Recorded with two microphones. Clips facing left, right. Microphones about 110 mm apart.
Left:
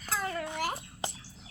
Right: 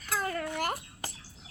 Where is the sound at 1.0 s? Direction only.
20° left (ahead or behind).